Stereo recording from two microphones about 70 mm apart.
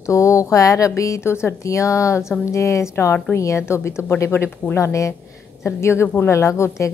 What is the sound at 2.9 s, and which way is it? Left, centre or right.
A woman's voice, left.